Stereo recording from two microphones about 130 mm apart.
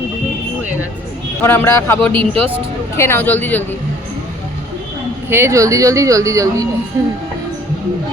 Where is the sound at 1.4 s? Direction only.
15° left (ahead or behind).